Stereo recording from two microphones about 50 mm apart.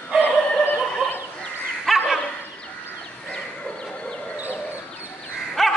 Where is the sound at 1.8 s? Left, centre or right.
Centre.